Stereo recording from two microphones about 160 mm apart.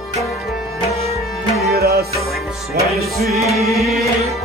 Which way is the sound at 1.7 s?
75° right (ahead or behind).